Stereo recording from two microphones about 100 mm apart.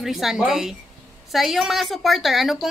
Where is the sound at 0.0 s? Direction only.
Centre (ahead or behind).